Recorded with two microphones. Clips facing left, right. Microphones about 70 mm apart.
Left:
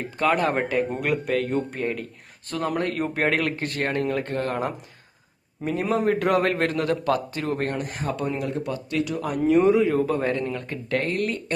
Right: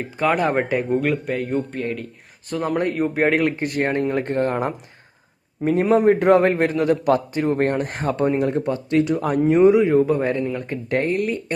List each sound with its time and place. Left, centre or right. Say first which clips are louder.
0.2 s speech: right 3 dB; centre
1.3 s a man's voice: even; centre
1.5 s speech: right 2 dB; centre
2.5 s a man's voice: right 4 dB; centre
5.6 s a man's voice: right 7 dB; centre
6.1 s speech: right 5 dB; right
6.6 s a man's voice: right 5 dB; centre
7.6 s a man's voice: right 7 dB; right
11.1 s a man's voice: right 4 dB; centre